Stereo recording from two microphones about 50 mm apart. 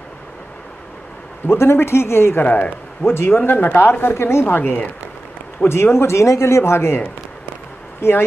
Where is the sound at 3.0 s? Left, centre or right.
Left.